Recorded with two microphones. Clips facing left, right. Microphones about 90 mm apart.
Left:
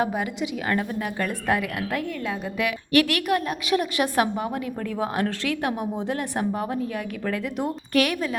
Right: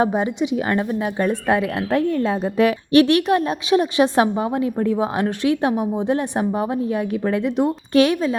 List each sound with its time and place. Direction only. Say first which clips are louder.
0.0 s speech: right 6 dB; 25° right (ahead or behind)